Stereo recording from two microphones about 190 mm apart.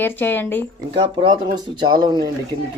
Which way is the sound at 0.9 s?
25° right (ahead or behind).